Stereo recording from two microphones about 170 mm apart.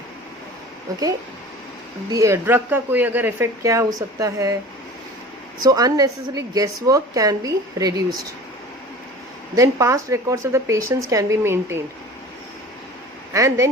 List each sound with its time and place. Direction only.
2.0 s speech: 20° right (ahead or behind)
5.6 s a woman's voice: 20° right (ahead or behind)
9.6 s speech: 20° right (ahead or behind)
13.3 s a woman's voice: 20° right (ahead or behind)